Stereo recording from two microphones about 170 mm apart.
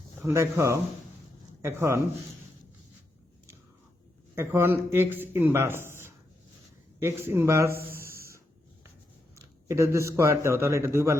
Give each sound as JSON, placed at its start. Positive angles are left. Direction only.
{"t": 0.2, "sound": "a man's voice", "side_deg": -15}
{"t": 4.4, "sound": "a man's voice", "side_deg": -15}
{"t": 7.9, "sound": "a sound", "side_deg": -15}
{"t": 9.3, "sound": "speech", "side_deg": -15}